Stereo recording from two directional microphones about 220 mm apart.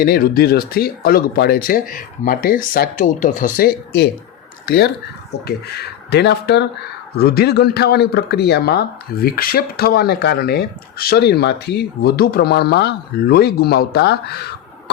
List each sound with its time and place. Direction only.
0.0 s speech: 45° left (ahead or behind)